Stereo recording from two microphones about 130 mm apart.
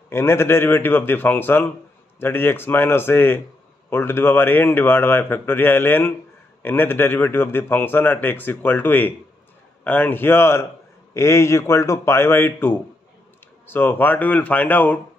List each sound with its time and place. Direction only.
0.1 s a man's voice: 20° left (ahead or behind)